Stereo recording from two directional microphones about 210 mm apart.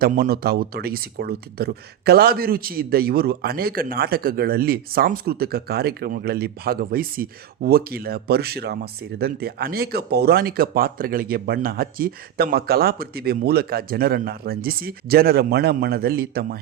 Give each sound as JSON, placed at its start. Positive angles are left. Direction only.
{"t": 0.0, "sound": "speech", "side_deg": -45}